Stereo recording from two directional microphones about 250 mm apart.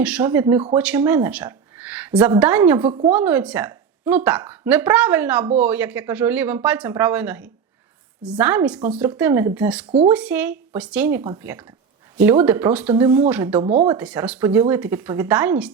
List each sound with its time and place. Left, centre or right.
0.0 s speech: centre
13.6 s speech: right
13.9 s speech: centre